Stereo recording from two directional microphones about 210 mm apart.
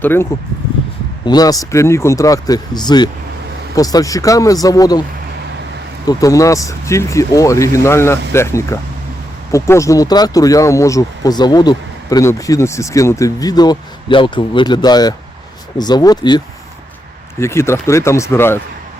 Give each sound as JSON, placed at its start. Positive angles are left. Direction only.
{"t": 0.0, "sound": "speech", "side_deg": 10}
{"t": 6.1, "sound": "speech", "side_deg": 15}
{"t": 17.4, "sound": "speech", "side_deg": 10}